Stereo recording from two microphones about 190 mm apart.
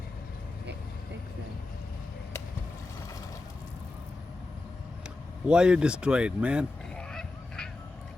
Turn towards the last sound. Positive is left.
turn(degrees=5)  # may be behind; listen again after turning